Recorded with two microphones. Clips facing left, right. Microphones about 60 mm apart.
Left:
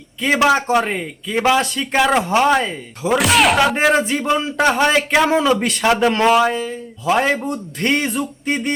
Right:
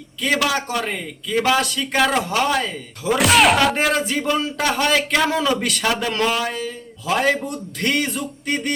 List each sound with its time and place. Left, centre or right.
0.2 s a man's voice: left
3.2 s speech: centre
3.8 s a man's voice: left